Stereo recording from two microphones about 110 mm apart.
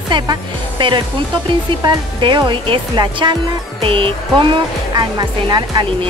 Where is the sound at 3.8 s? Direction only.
55° right (ahead or behind).